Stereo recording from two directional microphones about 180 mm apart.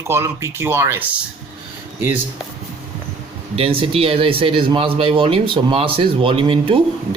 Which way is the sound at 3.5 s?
30° right (ahead or behind).